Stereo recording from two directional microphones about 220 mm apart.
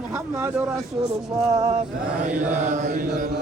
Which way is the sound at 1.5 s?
15° right (ahead or behind).